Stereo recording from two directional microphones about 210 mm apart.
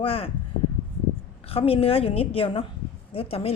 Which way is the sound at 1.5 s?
25° left (ahead or behind).